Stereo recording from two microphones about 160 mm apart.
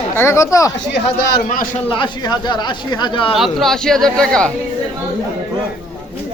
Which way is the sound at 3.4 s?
Centre (ahead or behind).